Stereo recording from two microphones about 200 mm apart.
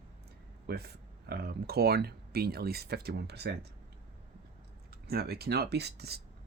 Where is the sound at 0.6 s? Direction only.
55° right (ahead or behind).